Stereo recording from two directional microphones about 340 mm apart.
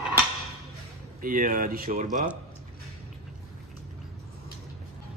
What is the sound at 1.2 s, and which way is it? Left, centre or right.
Dishes, right.